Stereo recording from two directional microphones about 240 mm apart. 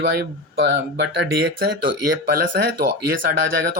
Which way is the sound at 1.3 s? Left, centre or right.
Right.